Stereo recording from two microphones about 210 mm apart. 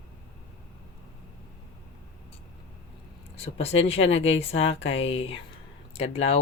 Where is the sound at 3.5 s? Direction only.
30° left (ahead or behind).